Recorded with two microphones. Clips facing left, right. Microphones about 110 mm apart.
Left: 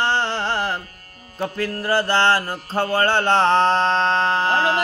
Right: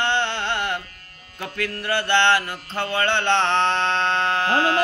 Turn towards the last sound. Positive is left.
turn(degrees=35)  # may be behind; listen again after turning